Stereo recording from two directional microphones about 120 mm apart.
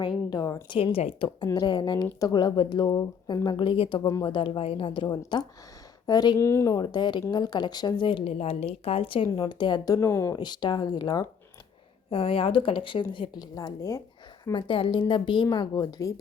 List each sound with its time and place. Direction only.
0.0 s speech: 35° left (ahead or behind)
0.9 s speech: 55° left (ahead or behind)
1.5 s speech: 35° left (ahead or behind)
4.1 s speech: 35° left (ahead or behind)
4.4 s a woman's voice: 45° left (ahead or behind)
6.4 s speech: 25° left (ahead or behind)
10.3 s speech: 35° left (ahead or behind)
12.1 s a woman's voice: 50° left (ahead or behind); by 14.0 s 30° left (ahead or behind)
14.5 s speech: 45° left (ahead or behind)